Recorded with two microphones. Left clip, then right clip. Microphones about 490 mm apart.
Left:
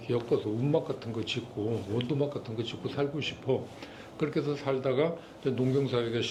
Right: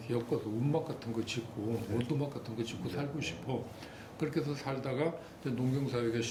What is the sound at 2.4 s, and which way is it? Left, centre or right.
A man's voice, left.